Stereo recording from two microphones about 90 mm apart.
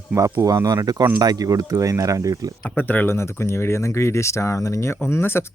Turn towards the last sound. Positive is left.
turn(degrees=25)  # may be behind; listen again after turning